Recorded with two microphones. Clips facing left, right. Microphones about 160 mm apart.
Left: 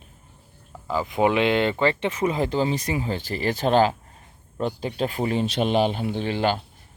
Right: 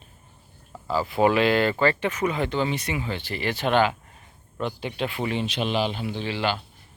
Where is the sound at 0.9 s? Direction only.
15° left (ahead or behind); by 6.6 s 50° left (ahead or behind).